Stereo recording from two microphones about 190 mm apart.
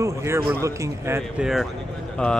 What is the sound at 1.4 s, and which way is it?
Speech, centre (ahead or behind).